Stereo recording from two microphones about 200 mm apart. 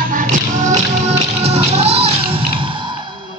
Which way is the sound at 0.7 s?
30° right (ahead or behind).